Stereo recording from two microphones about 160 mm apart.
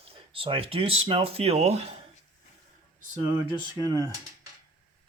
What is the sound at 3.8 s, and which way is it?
Speech, 25° right (ahead or behind).